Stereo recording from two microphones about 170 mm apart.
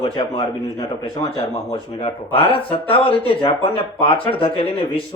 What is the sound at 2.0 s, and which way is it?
Speech, 35° left (ahead or behind).